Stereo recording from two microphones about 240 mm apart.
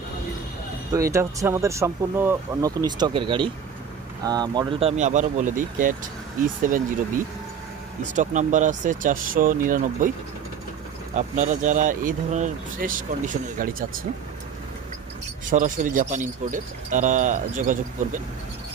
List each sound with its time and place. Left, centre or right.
0.9 s speech: centre; by 6.8 s right
8.1 s speech: right
11.1 s speech: right
15.4 s speech: right